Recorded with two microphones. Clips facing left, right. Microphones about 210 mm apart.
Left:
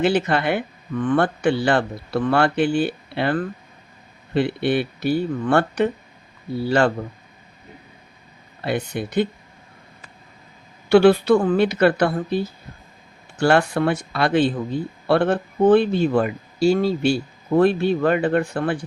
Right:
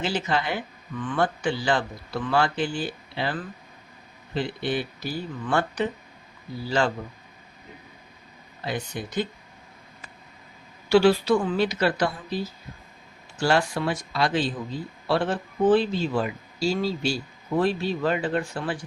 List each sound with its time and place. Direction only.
0.0 s speech: 60° left (ahead or behind)
8.6 s speech: 65° left (ahead or behind)
10.8 s speech: 60° left (ahead or behind)